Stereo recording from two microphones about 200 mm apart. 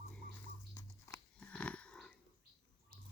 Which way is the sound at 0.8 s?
10° left (ahead or behind).